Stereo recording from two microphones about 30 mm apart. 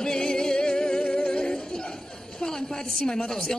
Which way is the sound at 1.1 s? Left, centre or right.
Left.